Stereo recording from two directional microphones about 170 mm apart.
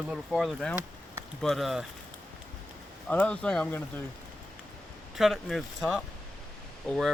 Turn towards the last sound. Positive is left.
turn(degrees=0)  # may be behind; listen again after turning